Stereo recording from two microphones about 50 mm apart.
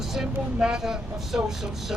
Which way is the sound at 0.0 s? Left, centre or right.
Centre.